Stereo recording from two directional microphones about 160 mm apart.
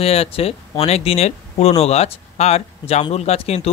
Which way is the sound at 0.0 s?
40° left (ahead or behind).